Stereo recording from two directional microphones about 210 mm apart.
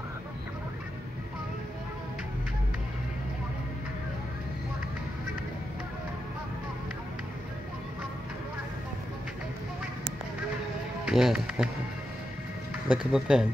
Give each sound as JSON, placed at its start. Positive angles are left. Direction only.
{"t": 11.1, "sound": "speech", "side_deg": -5}
{"t": 12.8, "sound": "speech", "side_deg": -5}